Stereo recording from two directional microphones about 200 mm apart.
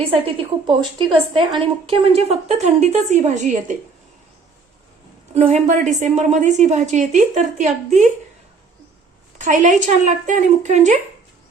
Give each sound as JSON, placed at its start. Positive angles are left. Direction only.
{"t": 0.0, "sound": "a woman's voice", "side_deg": -30}
{"t": 5.3, "sound": "a woman's voice", "side_deg": -30}
{"t": 9.4, "sound": "a woman's voice", "side_deg": -40}